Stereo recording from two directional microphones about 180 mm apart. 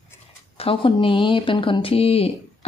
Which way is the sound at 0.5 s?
30° left (ahead or behind).